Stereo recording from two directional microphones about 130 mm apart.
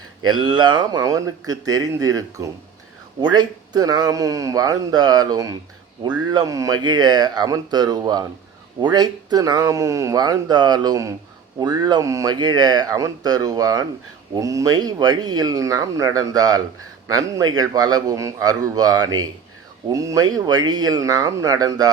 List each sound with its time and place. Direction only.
0.3 s speech: 35° right (ahead or behind)